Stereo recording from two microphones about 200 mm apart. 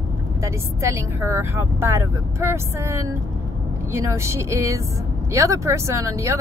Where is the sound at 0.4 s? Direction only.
15° right (ahead or behind).